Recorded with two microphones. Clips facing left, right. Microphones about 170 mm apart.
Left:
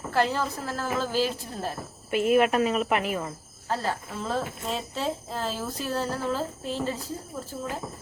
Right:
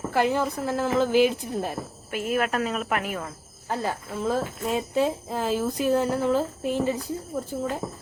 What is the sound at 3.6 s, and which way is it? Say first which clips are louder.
Speech: right 1 dB; 10° right (ahead or behind).